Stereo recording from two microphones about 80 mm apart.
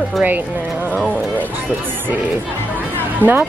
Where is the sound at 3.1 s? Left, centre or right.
Right.